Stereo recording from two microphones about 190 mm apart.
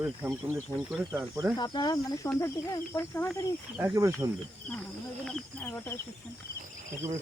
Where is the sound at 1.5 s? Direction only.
20° left (ahead or behind).